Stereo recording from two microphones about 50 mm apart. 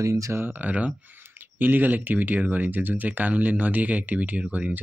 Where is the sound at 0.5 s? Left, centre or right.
Right.